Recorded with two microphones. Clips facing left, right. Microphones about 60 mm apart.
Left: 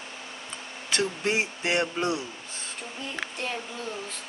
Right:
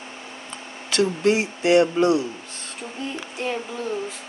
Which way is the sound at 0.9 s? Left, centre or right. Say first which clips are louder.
Right 7 dB; left.